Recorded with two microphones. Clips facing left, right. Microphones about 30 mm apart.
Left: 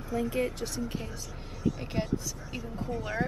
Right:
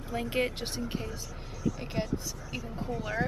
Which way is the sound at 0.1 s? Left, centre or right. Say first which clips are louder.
Left 1 dB; right.